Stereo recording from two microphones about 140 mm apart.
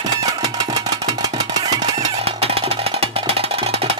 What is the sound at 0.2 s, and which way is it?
Music, 25° right (ahead or behind).